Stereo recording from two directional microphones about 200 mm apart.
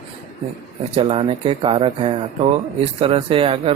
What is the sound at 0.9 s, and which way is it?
Speech, 25° right (ahead or behind).